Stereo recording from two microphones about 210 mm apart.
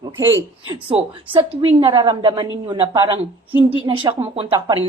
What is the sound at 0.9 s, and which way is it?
A woman's voice, 25° right (ahead or behind).